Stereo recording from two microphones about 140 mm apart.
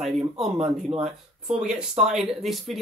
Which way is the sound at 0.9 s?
50° right (ahead or behind).